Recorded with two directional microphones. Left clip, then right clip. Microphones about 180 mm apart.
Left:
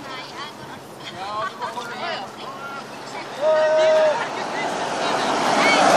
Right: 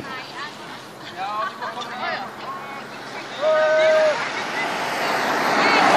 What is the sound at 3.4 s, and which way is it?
Vehicle, 30° left (ahead or behind).